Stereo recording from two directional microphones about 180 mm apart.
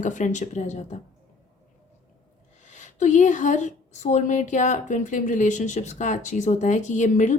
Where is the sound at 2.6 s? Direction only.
40° left (ahead or behind).